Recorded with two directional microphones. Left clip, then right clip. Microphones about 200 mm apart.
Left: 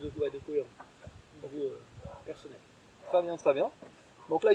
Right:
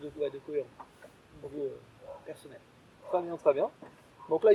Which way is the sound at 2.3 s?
15° right (ahead or behind).